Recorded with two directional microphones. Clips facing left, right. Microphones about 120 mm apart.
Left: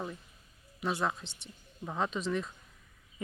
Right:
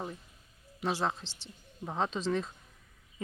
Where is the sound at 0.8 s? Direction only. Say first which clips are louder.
Right 1 dB; 30° right (ahead or behind).